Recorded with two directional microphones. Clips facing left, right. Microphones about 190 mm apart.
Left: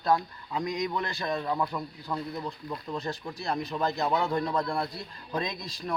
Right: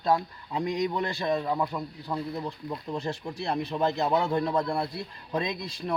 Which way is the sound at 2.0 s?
30° right (ahead or behind).